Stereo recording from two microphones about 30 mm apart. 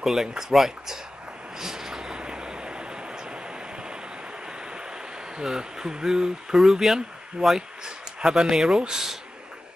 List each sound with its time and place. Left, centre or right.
0.0 s speech: centre
1.6 s vehicle: centre; by 3.3 s right
5.4 s speech: right